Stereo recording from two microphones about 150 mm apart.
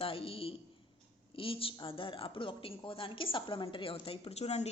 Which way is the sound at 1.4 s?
35° left (ahead or behind).